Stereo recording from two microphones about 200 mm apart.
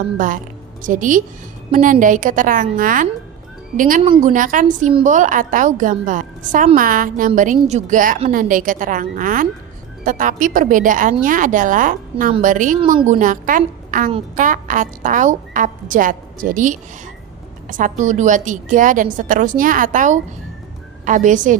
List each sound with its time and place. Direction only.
0.8 s a woman's voice: 40° right (ahead or behind)